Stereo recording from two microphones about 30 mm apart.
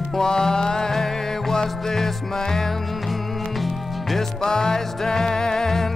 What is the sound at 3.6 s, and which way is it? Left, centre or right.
Music, centre.